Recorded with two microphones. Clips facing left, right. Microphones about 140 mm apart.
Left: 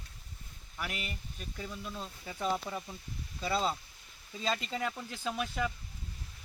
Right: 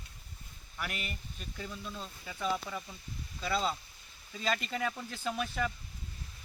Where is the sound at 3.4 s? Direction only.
30° left (ahead or behind).